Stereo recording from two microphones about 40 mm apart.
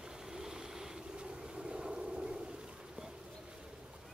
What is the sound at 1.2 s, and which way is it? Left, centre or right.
Vehicle, right.